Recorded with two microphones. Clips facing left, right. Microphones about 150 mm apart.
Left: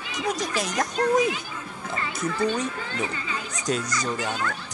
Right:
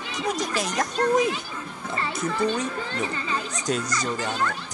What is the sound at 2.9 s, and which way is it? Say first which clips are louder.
Speech: right 2 dB; 40° right (ahead or behind).